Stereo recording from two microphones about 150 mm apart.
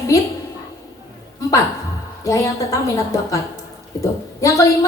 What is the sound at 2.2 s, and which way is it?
Speech, 20° left (ahead or behind).